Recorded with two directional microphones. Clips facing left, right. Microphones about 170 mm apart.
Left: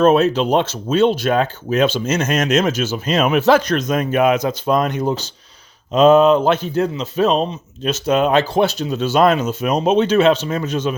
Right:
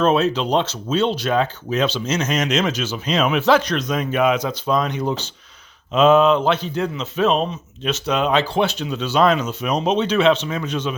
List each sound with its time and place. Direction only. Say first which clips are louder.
0.0 s a man's voice: left 4 dB; 45° left (ahead or behind)